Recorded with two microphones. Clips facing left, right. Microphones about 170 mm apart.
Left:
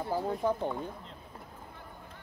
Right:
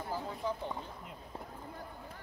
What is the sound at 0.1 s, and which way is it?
Speech, 55° left (ahead or behind).